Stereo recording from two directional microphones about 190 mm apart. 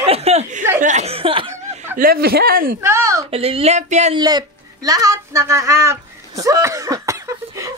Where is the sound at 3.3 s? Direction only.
30° right (ahead or behind).